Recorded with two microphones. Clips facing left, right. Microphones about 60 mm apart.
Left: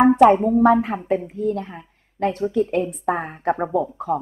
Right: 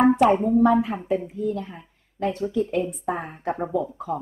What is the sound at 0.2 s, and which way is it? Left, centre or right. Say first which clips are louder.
A woman's voice: left 4 dB; left.